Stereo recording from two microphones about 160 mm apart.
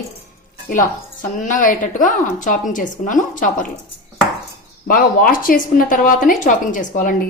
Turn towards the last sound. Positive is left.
turn(degrees=55)  # may be behind; listen again after turning